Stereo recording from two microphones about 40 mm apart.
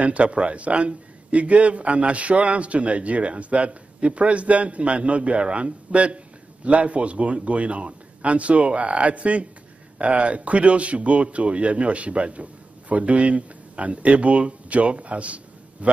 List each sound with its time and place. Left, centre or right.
0.0 s a man's voice: right